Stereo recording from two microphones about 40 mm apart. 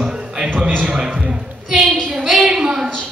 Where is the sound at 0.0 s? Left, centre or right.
Right.